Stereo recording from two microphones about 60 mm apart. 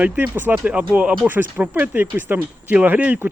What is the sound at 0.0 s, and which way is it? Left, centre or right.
Speech, right.